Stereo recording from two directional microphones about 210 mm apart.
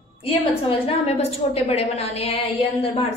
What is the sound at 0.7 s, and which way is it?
A woman's voice, 30° left (ahead or behind).